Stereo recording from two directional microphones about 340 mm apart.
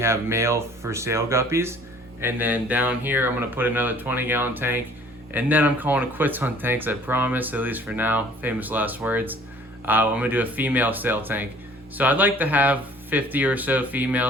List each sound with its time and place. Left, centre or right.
0.0 s speech: centre